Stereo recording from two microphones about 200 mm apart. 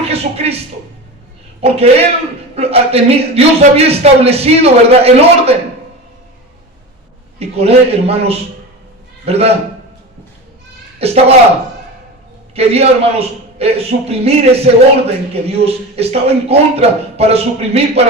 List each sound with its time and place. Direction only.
0.1 s a man's voice: 30° right (ahead or behind)
1.6 s a man's voice: 30° right (ahead or behind)
7.3 s a man's voice: 30° right (ahead or behind)
11.0 s a man's voice: 30° right (ahead or behind)
12.5 s a man's voice: 30° right (ahead or behind)